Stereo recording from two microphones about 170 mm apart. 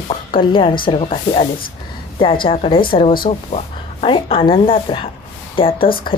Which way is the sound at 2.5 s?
35° left (ahead or behind).